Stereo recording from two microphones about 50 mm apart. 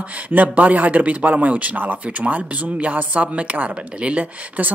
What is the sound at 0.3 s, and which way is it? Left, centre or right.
Speech, right.